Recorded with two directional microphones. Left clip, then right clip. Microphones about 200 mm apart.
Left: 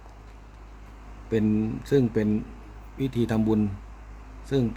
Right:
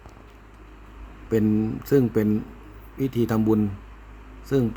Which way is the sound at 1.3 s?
20° right (ahead or behind).